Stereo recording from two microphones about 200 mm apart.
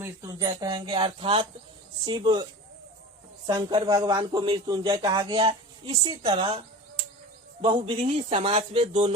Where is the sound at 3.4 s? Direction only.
20° right (ahead or behind).